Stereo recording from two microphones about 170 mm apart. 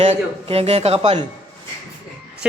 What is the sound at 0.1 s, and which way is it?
A man's voice, 35° right (ahead or behind).